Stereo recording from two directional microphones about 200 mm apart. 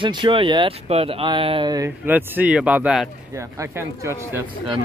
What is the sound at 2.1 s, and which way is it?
Speech, 10° right (ahead or behind).